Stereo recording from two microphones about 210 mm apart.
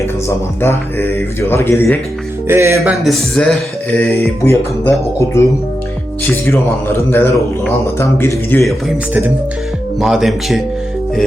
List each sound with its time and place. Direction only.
0.3 s speech: 10° left (ahead or behind)
2.5 s music: 10° right (ahead or behind)
3.0 s speech: centre (ahead or behind)
10.0 s speech: centre (ahead or behind)